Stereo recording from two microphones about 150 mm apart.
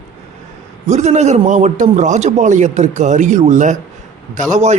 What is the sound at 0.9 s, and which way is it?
A man's voice, 50° right (ahead or behind).